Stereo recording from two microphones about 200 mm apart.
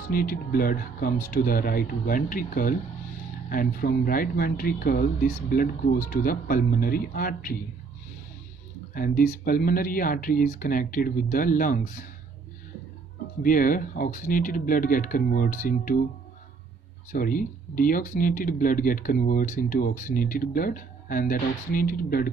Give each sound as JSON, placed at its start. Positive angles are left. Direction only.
{"t": 0.1, "sound": "speech", "side_deg": 45}
{"t": 8.9, "sound": "speech", "side_deg": 45}
{"t": 13.4, "sound": "speech", "side_deg": 45}
{"t": 17.1, "sound": "speech", "side_deg": 45}